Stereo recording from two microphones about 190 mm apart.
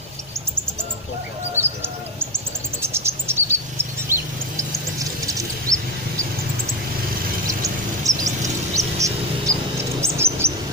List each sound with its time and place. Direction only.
1.6 s bird: 10° right (ahead or behind)
2.8 s cricket: 15° right (ahead or behind)
7.4 s a sound: 15° right (ahead or behind)
8.4 s music: 15° right (ahead or behind)
10.0 s chirp: 15° right (ahead or behind)